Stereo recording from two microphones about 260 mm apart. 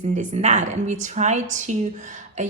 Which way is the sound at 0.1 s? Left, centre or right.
Right.